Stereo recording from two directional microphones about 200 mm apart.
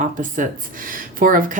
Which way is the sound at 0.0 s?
40° right (ahead or behind).